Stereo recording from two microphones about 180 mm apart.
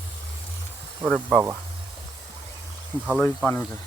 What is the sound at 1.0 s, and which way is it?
Speech, centre (ahead or behind).